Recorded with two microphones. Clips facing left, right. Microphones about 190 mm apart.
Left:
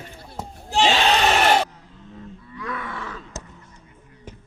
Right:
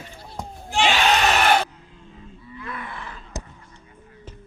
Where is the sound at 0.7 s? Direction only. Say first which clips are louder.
Left 2 dB; 35° left (ahead or behind).